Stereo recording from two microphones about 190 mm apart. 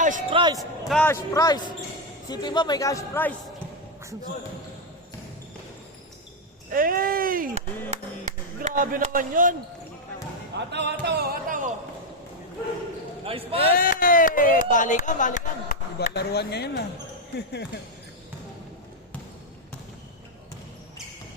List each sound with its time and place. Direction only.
0.0 s speech: 40° right (ahead or behind)
0.3 s speech: 25° right (ahead or behind)
0.6 s a man's voice: 5° left (ahead or behind)
6.7 s speech: 50° right (ahead or behind)
8.6 s speech: 45° right (ahead or behind)
10.7 s music: 65° right (ahead or behind); by 11.7 s 45° right (ahead or behind)
13.2 s speech: 30° right (ahead or behind)
13.6 s speech: 50° left (ahead or behind)
16.1 s speech: 60° left (ahead or behind)